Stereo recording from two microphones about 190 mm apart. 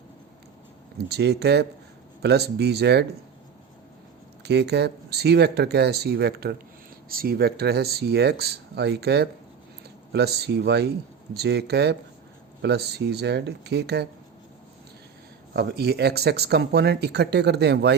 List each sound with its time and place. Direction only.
1.0 s speech: 60° right (ahead or behind)
4.4 s speech: 60° right (ahead or behind)
15.5 s speech: 55° right (ahead or behind)